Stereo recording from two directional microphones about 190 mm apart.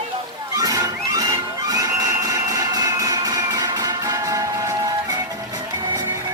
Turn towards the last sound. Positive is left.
turn(degrees=-20)  # may be behind; listen again after turning